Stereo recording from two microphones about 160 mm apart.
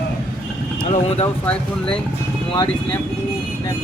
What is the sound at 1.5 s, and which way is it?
Speech, 5° left (ahead or behind).